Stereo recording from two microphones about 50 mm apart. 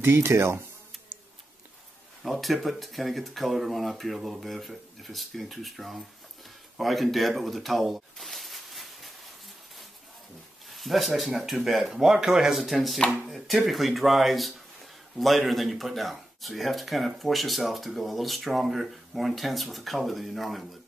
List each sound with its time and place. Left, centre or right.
0.0 s speech: right
2.2 s speech: centre
10.7 s speech: centre